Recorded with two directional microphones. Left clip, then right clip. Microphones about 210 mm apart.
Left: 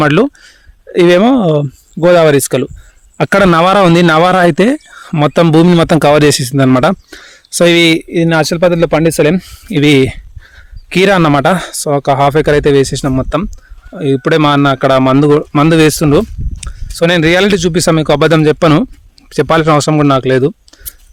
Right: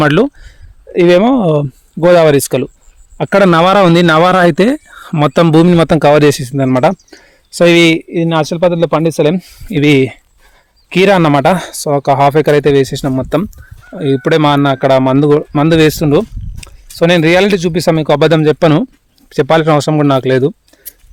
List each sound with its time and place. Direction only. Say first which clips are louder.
0.0 s speech: even; 5° left (ahead or behind)
3.2 s speech: even; 25° left (ahead or behind)